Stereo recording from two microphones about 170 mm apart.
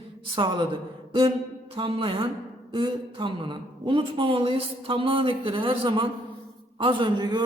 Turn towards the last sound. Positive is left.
turn(degrees=-25)  # may be behind; listen again after turning